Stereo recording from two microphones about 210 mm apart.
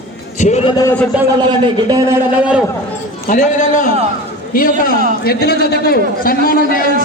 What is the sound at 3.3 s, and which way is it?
A man's voice, 40° left (ahead or behind).